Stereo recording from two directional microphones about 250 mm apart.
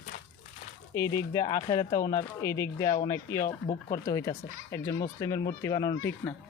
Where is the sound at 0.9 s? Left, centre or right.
Centre.